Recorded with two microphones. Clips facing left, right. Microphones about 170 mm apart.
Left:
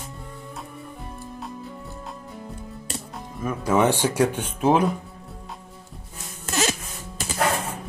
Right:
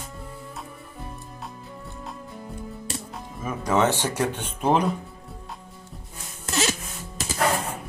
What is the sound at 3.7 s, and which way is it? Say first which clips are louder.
Speech: left 3 dB; 10° left (ahead or behind).